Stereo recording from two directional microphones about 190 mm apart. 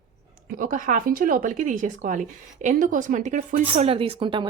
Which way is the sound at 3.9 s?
30° right (ahead or behind).